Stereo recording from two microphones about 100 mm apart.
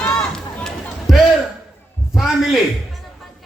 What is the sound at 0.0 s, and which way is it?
Run, 5° left (ahead or behind).